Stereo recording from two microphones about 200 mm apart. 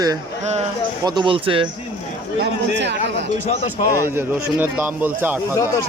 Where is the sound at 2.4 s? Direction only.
60° right (ahead or behind).